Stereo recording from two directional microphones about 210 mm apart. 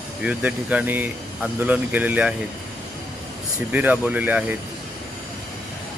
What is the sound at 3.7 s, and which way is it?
Speech, 10° right (ahead or behind).